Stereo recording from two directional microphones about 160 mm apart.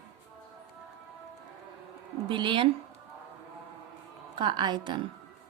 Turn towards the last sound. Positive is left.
turn(degrees=-30)  # may be behind; listen again after turning